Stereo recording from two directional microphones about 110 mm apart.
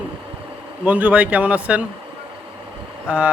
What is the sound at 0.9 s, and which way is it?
Speech, 15° right (ahead or behind).